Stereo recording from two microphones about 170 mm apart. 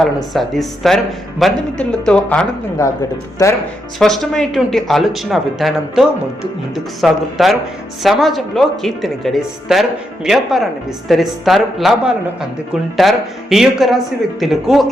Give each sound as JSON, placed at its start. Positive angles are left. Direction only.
{"t": 0.0, "sound": "speech", "side_deg": 0}
{"t": 2.8, "sound": "speech", "side_deg": 20}
{"t": 4.0, "sound": "speech", "side_deg": 0}